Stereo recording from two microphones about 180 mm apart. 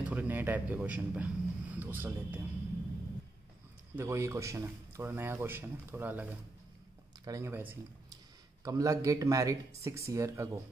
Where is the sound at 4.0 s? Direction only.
15° right (ahead or behind).